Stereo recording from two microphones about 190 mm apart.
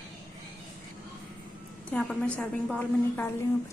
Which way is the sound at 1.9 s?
5° left (ahead or behind).